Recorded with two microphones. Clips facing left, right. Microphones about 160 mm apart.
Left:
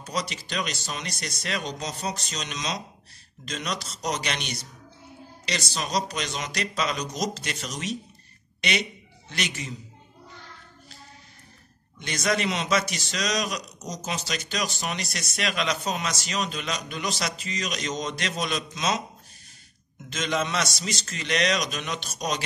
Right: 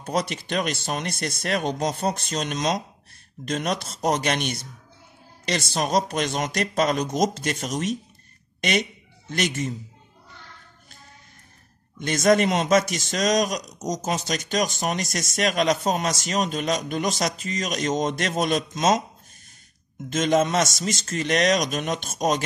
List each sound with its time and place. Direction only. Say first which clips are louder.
0.0 s a man's voice: right 6 dB; 55° right (ahead or behind)
12.0 s a man's voice: right 8 dB; 50° right (ahead or behind)
20.1 s a man's voice: right 7 dB; 45° right (ahead or behind)